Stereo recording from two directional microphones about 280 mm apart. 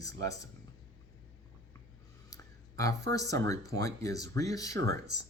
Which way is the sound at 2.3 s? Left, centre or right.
Centre.